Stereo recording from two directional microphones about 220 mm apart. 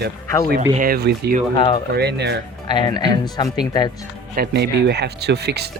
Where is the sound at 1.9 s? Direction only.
50° right (ahead or behind).